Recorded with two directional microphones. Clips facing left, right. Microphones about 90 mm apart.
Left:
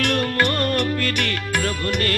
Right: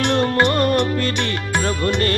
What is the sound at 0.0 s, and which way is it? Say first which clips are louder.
Music: right 4 dB; 25° right (ahead or behind).